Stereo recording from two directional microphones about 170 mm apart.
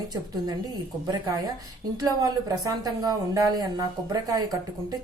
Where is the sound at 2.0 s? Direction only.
20° right (ahead or behind).